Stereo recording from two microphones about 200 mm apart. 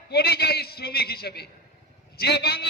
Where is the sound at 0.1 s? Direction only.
55° left (ahead or behind).